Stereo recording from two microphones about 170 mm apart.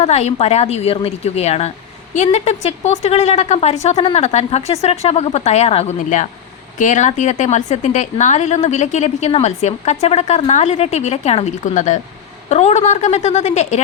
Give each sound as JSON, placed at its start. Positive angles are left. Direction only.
{"t": 0.0, "sound": "a woman's voice", "side_deg": 40}